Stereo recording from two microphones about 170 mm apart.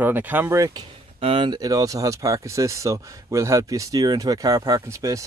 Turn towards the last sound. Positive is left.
turn(degrees=-20)  # may be behind; listen again after turning